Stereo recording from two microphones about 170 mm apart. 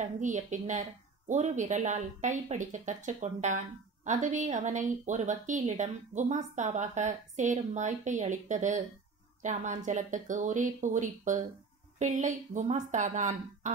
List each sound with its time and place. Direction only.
0.0 s speech: 45° right (ahead or behind)